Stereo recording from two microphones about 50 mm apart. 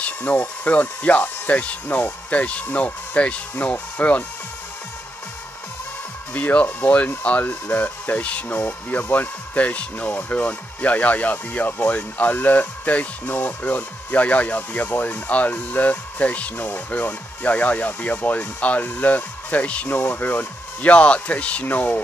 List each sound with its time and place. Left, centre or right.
0.0 s speech: left
6.3 s speech: left
8.2 s speech: left
19.9 s speech: left